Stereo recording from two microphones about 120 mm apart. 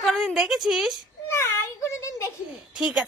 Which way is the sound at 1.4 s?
25° left (ahead or behind).